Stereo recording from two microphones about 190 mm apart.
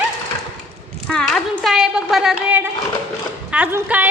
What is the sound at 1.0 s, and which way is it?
Speech, centre (ahead or behind).